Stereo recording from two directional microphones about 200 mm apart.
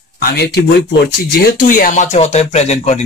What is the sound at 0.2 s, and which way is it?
Speech, 50° left (ahead or behind).